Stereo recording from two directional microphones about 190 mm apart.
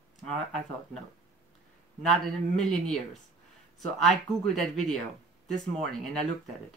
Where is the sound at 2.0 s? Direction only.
Centre (ahead or behind).